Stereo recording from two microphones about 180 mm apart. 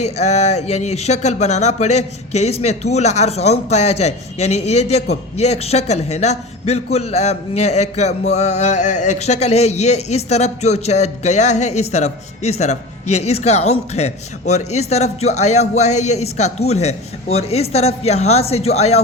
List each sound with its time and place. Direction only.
0.0 s speech: 35° left (ahead or behind)